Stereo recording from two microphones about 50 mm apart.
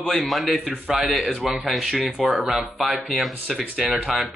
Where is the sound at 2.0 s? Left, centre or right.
Right.